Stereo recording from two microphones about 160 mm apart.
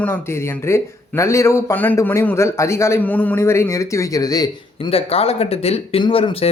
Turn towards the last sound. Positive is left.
turn(degrees=35)  # may be behind; listen again after turning